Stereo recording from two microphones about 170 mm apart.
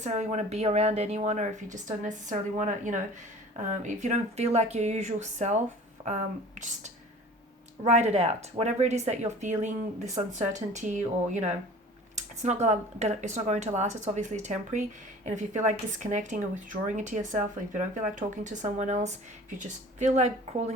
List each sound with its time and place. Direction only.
0.0 s speech: 45° right (ahead or behind)
7.9 s speech: 40° right (ahead or behind)